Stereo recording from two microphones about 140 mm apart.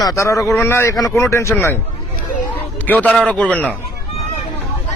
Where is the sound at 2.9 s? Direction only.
10° left (ahead or behind).